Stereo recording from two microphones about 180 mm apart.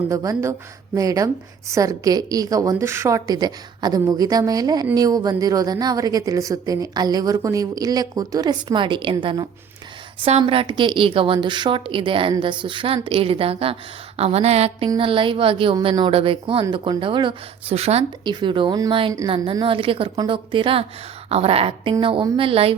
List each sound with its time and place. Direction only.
0.1 s a woman's voice: 20° right (ahead or behind)